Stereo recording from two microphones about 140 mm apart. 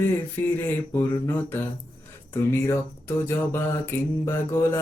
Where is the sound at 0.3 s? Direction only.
15° left (ahead or behind).